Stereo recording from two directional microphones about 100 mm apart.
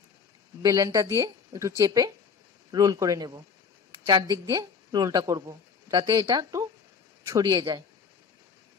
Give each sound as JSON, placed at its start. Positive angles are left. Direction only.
{"t": 0.6, "sound": "speech", "side_deg": -35}